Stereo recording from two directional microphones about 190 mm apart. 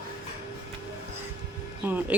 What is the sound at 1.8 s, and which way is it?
Speech, 10° right (ahead or behind).